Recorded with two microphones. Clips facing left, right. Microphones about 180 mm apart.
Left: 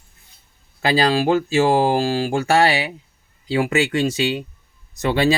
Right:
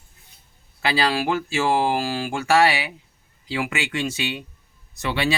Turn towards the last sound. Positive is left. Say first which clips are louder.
# left 6 dB
turn(degrees=35)  # may be behind; listen again after turning